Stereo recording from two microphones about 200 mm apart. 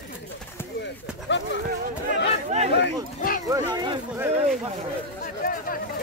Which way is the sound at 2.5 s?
30° right (ahead or behind).